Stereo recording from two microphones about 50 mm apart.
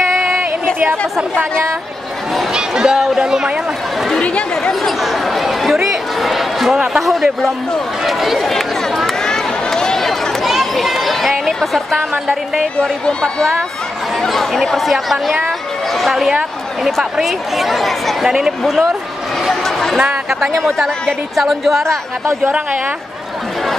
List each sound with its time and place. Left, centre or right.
2.5 s speech: centre
4.2 s speech: left
4.8 s speech: centre
8.0 s chatter: centre
12.1 s speech: centre
13.0 s a woman's voice: centre
19.5 s a sound: centre
20.2 s speech: centre
22.4 s a woman's voice: right